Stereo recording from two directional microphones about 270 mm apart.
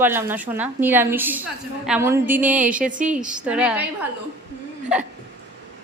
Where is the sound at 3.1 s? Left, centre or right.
Centre.